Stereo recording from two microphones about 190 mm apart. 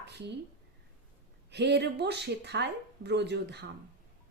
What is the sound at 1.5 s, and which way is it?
A woman's voice, 65° right (ahead or behind).